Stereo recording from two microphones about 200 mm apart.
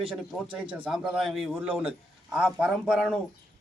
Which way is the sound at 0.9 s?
5° right (ahead or behind).